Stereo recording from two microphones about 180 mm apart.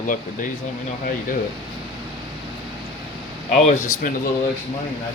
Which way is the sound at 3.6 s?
45° left (ahead or behind).